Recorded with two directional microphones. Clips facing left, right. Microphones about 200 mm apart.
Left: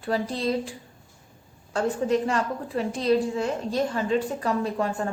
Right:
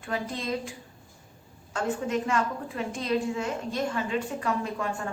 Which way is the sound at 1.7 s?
35° left (ahead or behind).